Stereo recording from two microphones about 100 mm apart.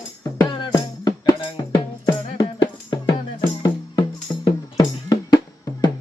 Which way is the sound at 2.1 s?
50° left (ahead or behind).